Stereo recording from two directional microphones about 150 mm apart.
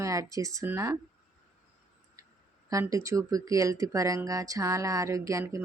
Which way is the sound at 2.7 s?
20° right (ahead or behind).